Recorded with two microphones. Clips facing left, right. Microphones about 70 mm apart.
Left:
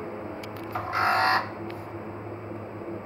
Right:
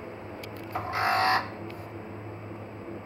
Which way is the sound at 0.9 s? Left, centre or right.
Left.